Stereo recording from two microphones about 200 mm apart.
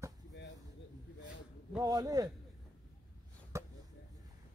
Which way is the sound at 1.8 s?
20° right (ahead or behind).